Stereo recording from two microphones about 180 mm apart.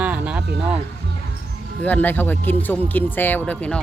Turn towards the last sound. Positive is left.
turn(degrees=5)  # may be behind; listen again after turning